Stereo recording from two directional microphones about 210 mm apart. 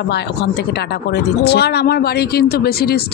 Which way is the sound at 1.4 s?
50° left (ahead or behind).